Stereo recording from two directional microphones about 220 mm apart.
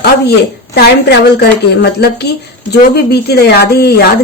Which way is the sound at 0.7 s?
45° left (ahead or behind).